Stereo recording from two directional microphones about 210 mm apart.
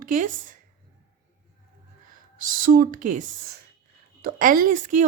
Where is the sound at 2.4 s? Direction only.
40° right (ahead or behind).